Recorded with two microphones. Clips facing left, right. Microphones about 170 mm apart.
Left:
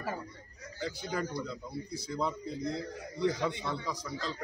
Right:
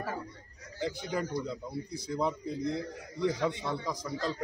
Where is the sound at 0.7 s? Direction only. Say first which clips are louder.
Right 2 dB; 20° right (ahead or behind).